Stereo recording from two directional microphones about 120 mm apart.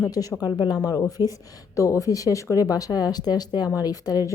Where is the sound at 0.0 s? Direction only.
30° left (ahead or behind).